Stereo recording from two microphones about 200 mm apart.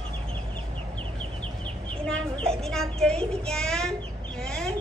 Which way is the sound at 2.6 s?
Centre (ahead or behind).